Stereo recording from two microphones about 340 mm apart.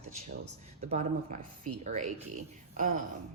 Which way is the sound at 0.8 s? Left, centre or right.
Right.